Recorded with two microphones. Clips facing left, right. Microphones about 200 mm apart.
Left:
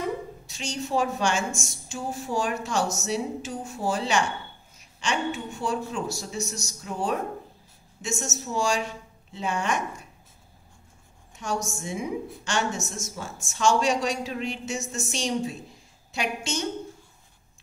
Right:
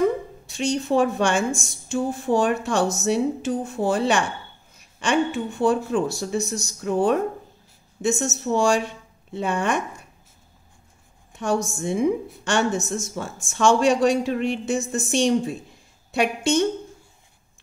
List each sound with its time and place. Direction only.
0.5 s speech: 55° right (ahead or behind)
11.3 s speech: 55° right (ahead or behind)